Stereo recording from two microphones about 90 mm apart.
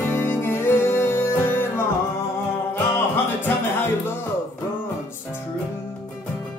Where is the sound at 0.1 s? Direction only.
25° left (ahead or behind).